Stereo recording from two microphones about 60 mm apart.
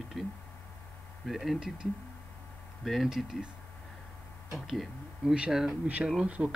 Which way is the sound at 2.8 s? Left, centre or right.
Centre.